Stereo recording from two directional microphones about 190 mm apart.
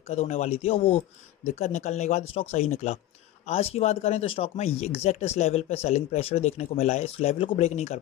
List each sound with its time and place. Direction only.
0.1 s speech: 35° left (ahead or behind)